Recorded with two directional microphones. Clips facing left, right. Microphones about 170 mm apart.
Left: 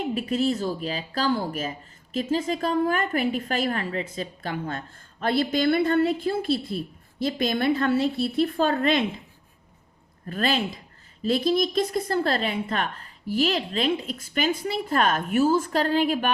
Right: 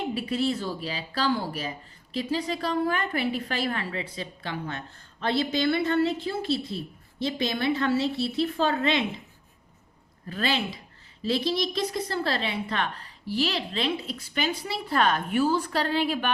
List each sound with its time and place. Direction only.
0.1 s a woman's voice: 45° left (ahead or behind)
10.2 s a woman's voice: 50° left (ahead or behind)